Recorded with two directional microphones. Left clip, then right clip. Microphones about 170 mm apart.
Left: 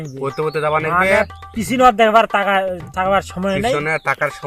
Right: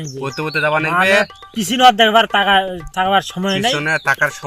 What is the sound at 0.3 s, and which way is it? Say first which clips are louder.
Speech: right 1 dB; 35° left (ahead or behind).